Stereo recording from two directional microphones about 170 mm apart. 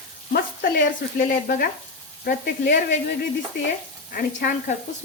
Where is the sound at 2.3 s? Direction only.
55° left (ahead or behind).